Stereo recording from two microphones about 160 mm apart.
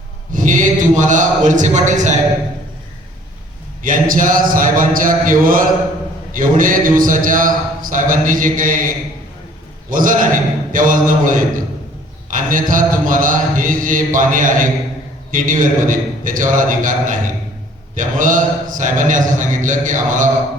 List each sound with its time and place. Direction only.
0.3 s a man's voice: 55° right (ahead or behind)
3.8 s speech: 60° right (ahead or behind)
9.9 s a man's voice: 55° right (ahead or behind)